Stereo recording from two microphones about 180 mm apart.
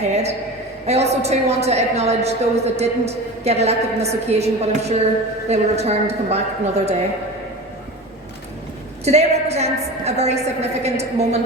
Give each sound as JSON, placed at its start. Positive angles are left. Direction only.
{"t": 0.1, "sound": "a woman's voice", "side_deg": -35}
{"t": 9.0, "sound": "a woman's voice", "side_deg": -35}